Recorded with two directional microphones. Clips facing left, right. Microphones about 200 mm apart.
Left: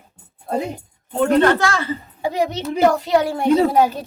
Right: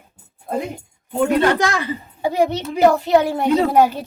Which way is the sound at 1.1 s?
10° right (ahead or behind).